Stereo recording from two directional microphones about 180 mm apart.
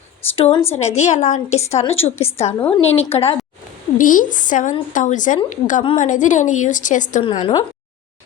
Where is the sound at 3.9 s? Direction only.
50° left (ahead or behind).